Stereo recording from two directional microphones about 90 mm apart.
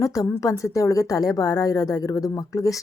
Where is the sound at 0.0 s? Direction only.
40° left (ahead or behind).